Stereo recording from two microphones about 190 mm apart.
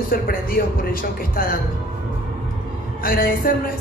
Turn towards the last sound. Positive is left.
turn(degrees=50)  # may be behind; listen again after turning